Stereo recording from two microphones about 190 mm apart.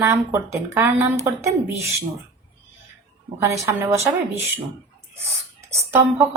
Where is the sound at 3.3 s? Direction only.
15° right (ahead or behind).